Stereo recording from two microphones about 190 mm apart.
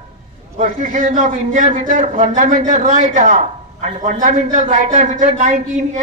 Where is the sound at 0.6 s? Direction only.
45° right (ahead or behind).